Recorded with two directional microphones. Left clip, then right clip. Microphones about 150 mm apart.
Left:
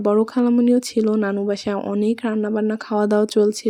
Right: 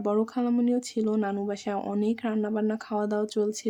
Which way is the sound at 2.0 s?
35° left (ahead or behind).